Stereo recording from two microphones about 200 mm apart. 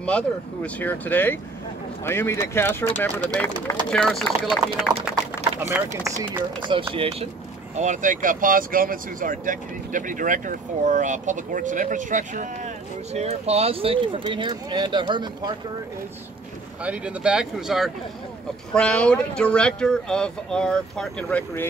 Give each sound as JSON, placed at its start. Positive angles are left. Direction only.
{"t": 0.7, "sound": "speech", "side_deg": 10}
{"t": 5.1, "sound": "speech", "side_deg": -10}
{"t": 16.8, "sound": "speech", "side_deg": -5}